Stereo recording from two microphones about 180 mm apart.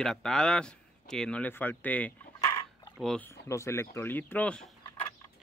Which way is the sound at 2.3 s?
20° left (ahead or behind).